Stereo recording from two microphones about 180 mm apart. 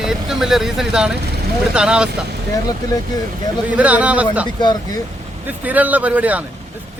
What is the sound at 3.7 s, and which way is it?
Speech, 10° right (ahead or behind).